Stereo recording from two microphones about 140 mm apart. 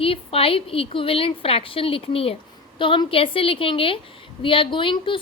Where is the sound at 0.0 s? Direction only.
40° left (ahead or behind).